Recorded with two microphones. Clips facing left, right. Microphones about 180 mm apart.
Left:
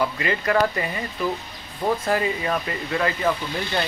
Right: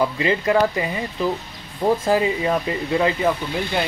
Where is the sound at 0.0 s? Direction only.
25° right (ahead or behind).